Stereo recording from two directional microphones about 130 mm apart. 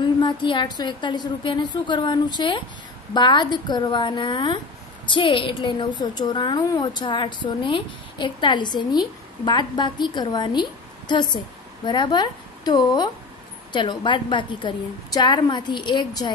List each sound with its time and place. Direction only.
0.0 s a woman's voice: 40° left (ahead or behind)